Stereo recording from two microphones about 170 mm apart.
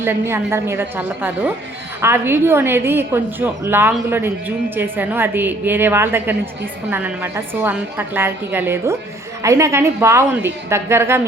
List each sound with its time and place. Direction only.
0.0 s a woman's voice: 15° right (ahead or behind)